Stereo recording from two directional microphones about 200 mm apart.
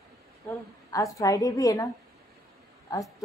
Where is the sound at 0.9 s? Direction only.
15° left (ahead or behind).